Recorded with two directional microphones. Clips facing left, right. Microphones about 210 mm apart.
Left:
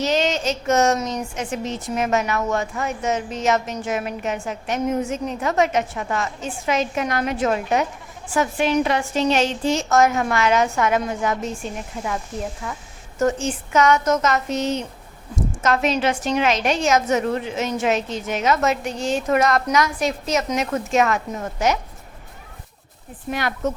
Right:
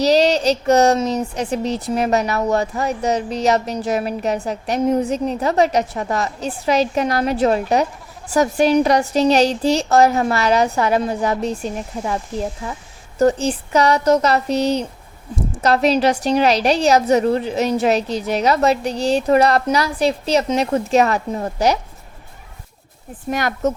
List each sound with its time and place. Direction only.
0.0 s speech: 35° right (ahead or behind)
23.3 s speech: 45° right (ahead or behind)